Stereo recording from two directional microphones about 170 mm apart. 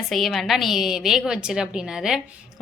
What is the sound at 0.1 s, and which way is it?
A woman's voice, centre (ahead or behind).